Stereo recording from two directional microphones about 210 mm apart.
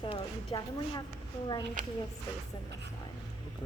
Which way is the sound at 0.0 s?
20° left (ahead or behind).